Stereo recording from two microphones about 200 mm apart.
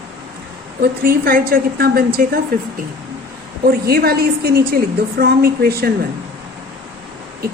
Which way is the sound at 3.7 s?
50° right (ahead or behind).